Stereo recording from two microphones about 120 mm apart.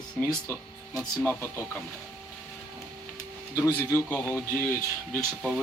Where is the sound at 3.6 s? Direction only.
20° left (ahead or behind).